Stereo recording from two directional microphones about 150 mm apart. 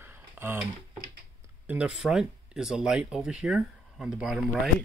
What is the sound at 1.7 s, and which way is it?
Speech, 5° right (ahead or behind).